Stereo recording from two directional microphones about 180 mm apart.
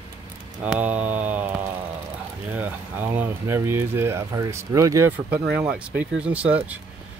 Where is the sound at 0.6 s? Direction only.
10° right (ahead or behind).